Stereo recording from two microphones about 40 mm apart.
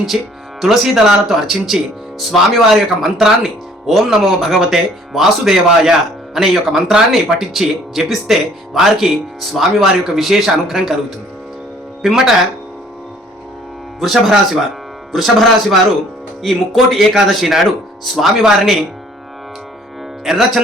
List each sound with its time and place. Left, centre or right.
0.6 s speech: centre
12.0 s speech: centre
14.0 s speech: centre
18.4 s speech: centre
20.2 s speech: centre